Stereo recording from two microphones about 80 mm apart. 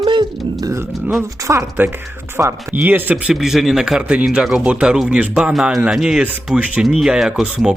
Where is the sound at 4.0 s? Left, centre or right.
Centre.